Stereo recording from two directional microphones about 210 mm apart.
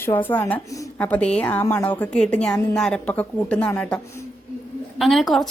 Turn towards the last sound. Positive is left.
turn(degrees=0)  # may be behind; listen again after turning